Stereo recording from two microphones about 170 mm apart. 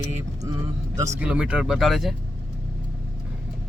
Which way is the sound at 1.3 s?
5° right (ahead or behind).